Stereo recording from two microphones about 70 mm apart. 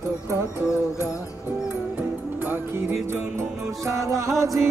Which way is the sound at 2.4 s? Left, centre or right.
Right.